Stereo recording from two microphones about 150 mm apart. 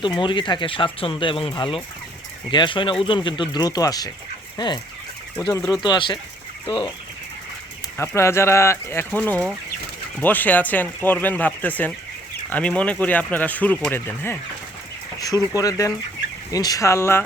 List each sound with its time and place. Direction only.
0.0 s speech: 30° left (ahead or behind)
7.9 s speech: 20° left (ahead or behind)
15.5 s speech: 25° left (ahead or behind)